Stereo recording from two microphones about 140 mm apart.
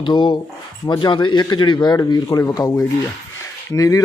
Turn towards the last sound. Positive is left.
turn(degrees=25)  # may be behind; listen again after turning